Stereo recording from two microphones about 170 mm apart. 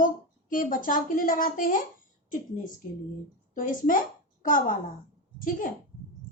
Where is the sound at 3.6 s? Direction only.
50° left (ahead or behind).